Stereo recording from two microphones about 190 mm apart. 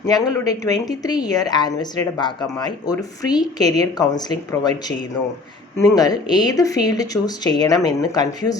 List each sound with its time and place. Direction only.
0.0 s a woman's voice: 20° left (ahead or behind)
6.0 s a woman's voice: 20° left (ahead or behind)